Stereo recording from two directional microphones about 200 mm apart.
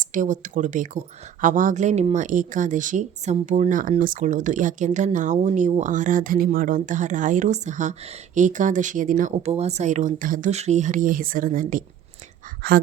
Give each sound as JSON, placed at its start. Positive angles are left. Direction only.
{"t": 0.0, "sound": "speech", "side_deg": -40}
{"t": 12.6, "sound": "speech", "side_deg": -55}